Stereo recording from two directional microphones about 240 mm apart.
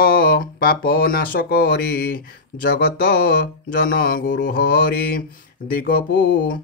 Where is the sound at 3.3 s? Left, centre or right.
Left.